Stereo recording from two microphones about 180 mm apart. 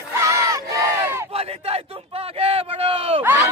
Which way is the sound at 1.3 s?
35° right (ahead or behind).